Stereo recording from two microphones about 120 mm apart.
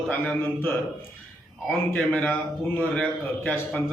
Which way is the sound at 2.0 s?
10° left (ahead or behind).